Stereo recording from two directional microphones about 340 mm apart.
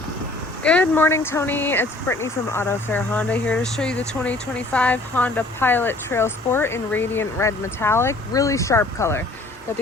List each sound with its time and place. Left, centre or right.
0.6 s speech: centre